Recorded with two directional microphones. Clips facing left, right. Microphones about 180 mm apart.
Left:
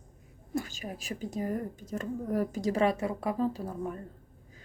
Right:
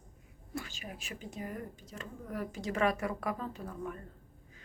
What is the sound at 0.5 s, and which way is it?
A woman's voice, 40° left (ahead or behind).